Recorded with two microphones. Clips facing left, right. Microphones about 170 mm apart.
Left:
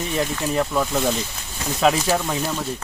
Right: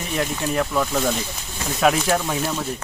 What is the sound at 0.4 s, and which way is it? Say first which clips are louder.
Speech: even; 5° left (ahead or behind).